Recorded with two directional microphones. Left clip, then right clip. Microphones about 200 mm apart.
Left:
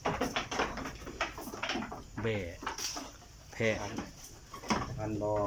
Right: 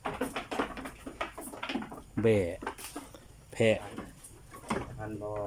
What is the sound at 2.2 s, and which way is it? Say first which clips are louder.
Speech: right 9 dB; 25° right (ahead or behind).